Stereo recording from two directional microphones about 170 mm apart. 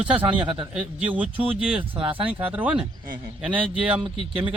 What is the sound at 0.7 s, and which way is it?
Speech, 5° right (ahead or behind).